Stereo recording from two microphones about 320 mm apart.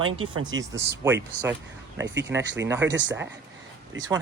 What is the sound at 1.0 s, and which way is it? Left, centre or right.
Speech, centre.